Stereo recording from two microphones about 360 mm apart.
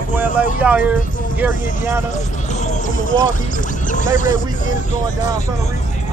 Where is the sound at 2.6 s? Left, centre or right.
Left.